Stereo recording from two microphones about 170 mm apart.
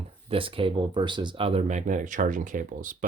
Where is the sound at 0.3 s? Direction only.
30° right (ahead or behind).